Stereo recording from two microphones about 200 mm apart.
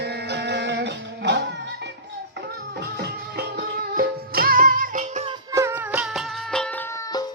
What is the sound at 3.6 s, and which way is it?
Music, 50° right (ahead or behind).